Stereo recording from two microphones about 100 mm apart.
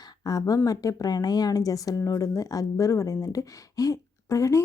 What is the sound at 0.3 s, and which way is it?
A woman's voice, 35° left (ahead or behind).